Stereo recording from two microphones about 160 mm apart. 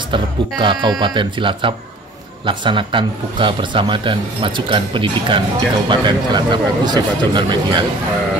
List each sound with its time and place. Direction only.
0.1 s a man's voice: 30° right (ahead or behind)